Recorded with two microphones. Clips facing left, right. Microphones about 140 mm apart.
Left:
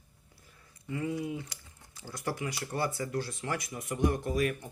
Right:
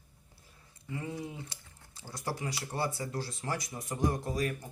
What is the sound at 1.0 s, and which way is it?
Speech, 30° right (ahead or behind).